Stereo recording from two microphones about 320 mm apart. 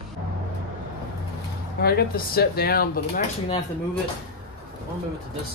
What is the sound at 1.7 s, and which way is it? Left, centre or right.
Speech, left.